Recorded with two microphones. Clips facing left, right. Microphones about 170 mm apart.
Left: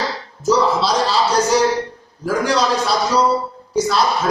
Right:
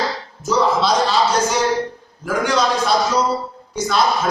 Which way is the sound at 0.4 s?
35° left (ahead or behind).